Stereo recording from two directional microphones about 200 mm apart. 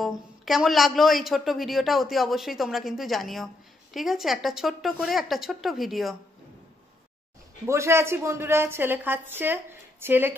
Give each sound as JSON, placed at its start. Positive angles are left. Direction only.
{"t": 0.0, "sound": "a man's voice", "side_deg": 0}
{"t": 7.6, "sound": "a woman's voice", "side_deg": -15}